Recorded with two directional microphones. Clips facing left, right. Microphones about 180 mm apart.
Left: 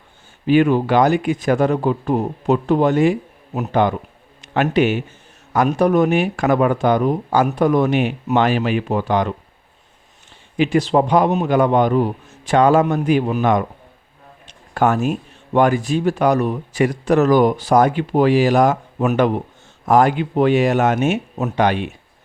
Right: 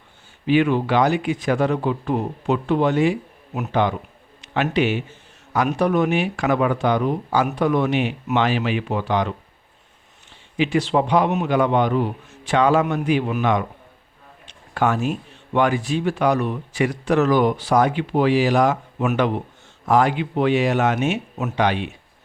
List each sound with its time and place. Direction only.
0.4 s a man's voice: 45° left (ahead or behind)
10.6 s speech: 45° left (ahead or behind)
14.4 s a sound: 45° left (ahead or behind)
15.5 s speech: 45° left (ahead or behind)